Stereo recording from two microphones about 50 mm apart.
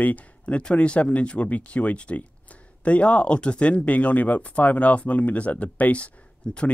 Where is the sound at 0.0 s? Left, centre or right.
Left.